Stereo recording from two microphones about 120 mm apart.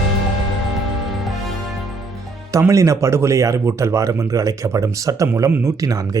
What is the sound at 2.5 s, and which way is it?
Speech, 25° right (ahead or behind).